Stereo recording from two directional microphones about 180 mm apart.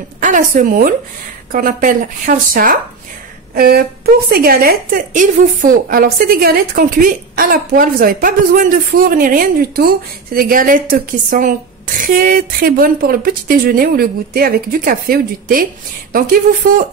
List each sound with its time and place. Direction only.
0.2 s a woman's voice: 45° right (ahead or behind)